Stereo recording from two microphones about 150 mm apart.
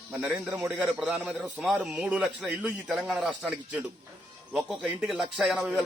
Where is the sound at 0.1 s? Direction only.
10° right (ahead or behind).